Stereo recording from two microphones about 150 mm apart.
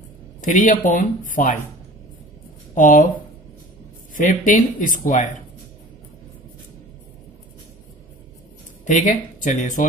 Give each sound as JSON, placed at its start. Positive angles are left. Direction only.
{"t": 0.4, "sound": "speech", "side_deg": 60}
{"t": 2.7, "sound": "speech", "side_deg": 60}
{"t": 4.1, "sound": "speech", "side_deg": 60}
{"t": 8.8, "sound": "speech", "side_deg": 60}